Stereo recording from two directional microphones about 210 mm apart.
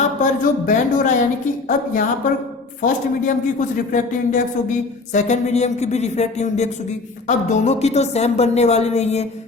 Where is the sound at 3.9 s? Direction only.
35° left (ahead or behind).